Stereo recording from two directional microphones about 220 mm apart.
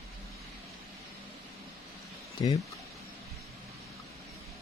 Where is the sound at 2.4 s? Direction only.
20° left (ahead or behind).